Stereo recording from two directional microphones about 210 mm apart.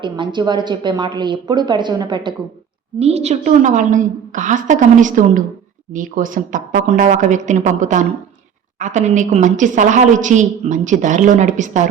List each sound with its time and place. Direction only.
0.0 s a woman's voice: 25° right (ahead or behind)